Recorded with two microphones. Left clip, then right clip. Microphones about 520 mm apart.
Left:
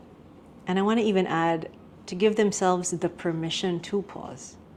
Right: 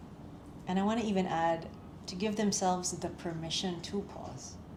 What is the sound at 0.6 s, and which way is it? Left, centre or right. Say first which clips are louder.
A woman's voice: left 9 dB; left.